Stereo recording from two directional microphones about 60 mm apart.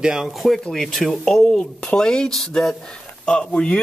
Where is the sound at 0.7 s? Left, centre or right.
Centre.